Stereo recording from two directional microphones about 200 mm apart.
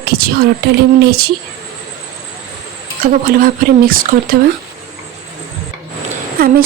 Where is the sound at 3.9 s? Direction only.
45° right (ahead or behind).